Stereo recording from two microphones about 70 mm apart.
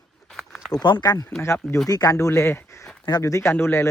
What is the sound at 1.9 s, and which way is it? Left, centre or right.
Speech, left.